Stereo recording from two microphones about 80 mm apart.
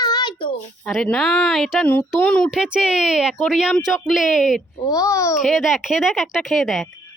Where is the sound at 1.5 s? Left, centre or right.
Centre.